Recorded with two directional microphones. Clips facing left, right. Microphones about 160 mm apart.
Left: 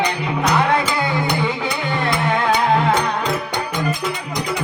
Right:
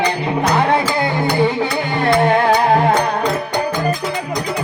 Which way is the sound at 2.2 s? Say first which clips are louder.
Right 3 dB; 40° right (ahead or behind).